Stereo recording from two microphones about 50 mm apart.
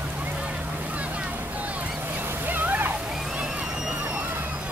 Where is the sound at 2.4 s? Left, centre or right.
Right.